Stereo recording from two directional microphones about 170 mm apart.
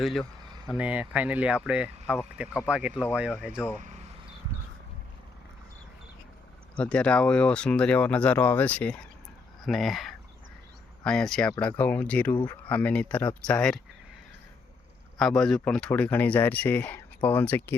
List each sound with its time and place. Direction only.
0.0 s speech: centre (ahead or behind)
3.8 s a sound: 45° right (ahead or behind)
6.7 s speech: 5° left (ahead or behind)
15.2 s speech: 5° left (ahead or behind)